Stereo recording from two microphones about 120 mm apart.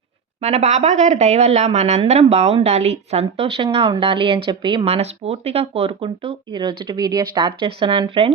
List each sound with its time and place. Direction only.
0.4 s speech: 70° right (ahead or behind); by 4.9 s 40° right (ahead or behind)
4.9 s speech: 60° right (ahead or behind)